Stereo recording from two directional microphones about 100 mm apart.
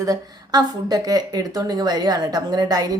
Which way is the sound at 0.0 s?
40° right (ahead or behind).